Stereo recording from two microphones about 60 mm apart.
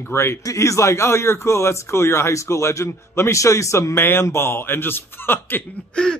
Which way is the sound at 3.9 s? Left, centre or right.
Left.